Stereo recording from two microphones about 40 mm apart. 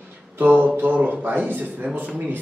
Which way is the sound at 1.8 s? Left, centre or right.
Right.